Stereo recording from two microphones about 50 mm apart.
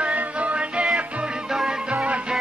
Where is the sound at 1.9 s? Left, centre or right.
Right.